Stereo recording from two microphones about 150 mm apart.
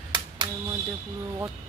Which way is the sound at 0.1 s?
30° right (ahead or behind).